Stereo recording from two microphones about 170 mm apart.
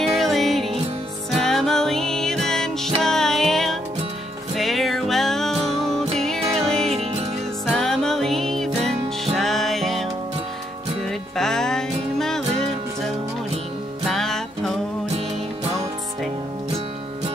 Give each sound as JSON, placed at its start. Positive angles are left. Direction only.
{"t": 0.0, "sound": "music", "side_deg": 0}
{"t": 6.9, "sound": "music", "side_deg": -35}
{"t": 7.6, "sound": "music", "side_deg": 0}
{"t": 11.1, "sound": "music", "side_deg": 5}
{"t": 14.0, "sound": "music", "side_deg": 0}